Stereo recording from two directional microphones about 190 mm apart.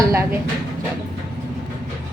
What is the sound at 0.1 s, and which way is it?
Speech, 15° right (ahead or behind).